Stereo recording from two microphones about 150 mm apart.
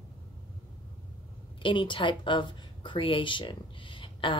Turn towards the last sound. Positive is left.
turn(degrees=35)  # may be behind; listen again after turning